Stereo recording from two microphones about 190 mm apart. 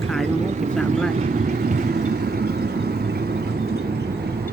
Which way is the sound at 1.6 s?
55° right (ahead or behind).